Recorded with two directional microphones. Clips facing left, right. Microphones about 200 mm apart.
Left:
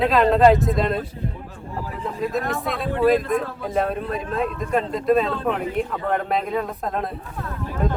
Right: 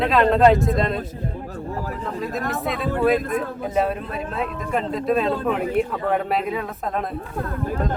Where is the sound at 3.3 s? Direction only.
5° right (ahead or behind).